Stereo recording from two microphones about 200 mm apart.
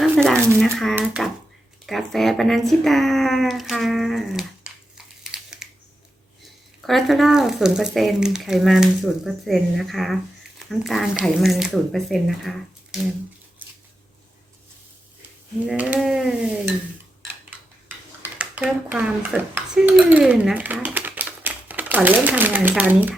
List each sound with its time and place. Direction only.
0.0 s a sound: 5° left (ahead or behind)
0.6 s speech: centre (ahead or behind)
6.8 s speech: centre (ahead or behind)
15.6 s speech: 5° right (ahead or behind)
18.2 s speech: 5° right (ahead or behind)